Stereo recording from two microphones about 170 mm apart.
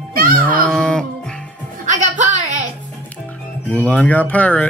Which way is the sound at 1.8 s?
45° right (ahead or behind).